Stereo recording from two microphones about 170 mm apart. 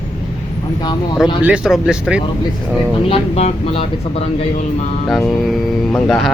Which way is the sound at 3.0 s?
35° left (ahead or behind).